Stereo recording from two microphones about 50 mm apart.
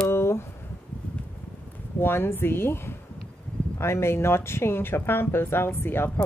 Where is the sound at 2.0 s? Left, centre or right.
Left.